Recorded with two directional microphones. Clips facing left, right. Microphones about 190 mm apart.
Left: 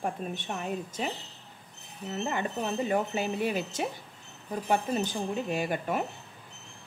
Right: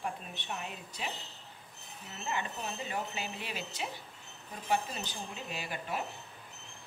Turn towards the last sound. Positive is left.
turn(degrees=50)  # may be behind; listen again after turning